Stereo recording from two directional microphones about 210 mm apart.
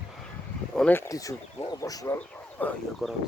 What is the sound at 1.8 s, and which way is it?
Speech, 15° left (ahead or behind).